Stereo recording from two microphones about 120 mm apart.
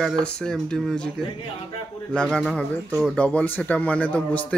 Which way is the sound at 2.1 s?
5° left (ahead or behind).